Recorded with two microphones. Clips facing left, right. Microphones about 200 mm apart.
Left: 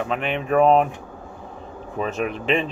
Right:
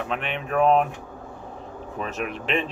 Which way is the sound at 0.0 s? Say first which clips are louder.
Left 4 dB; centre (ahead or behind).